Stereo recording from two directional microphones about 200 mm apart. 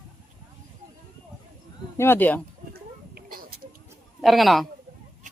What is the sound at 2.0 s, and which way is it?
Speech, 10° left (ahead or behind).